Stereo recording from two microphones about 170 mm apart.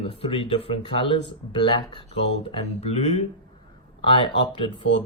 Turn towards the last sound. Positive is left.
turn(degrees=30)  # may be behind; listen again after turning